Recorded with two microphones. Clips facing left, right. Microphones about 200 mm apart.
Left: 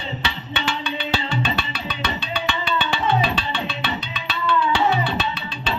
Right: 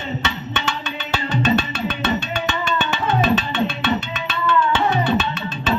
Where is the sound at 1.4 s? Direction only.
45° right (ahead or behind).